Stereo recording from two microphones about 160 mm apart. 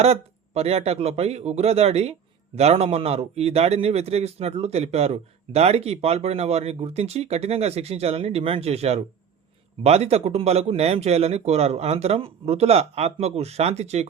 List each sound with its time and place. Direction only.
0.0 s speech: 40° right (ahead or behind)